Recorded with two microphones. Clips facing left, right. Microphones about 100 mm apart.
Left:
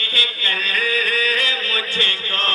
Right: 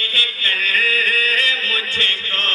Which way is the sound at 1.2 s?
20° left (ahead or behind).